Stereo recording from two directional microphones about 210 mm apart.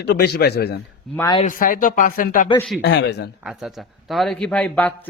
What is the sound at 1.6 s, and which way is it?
Speech, 40° left (ahead or behind).